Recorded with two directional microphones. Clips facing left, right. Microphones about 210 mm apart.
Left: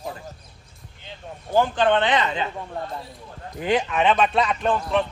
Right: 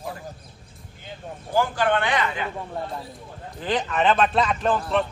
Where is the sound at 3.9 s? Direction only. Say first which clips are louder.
Right 3 dB; centre (ahead or behind).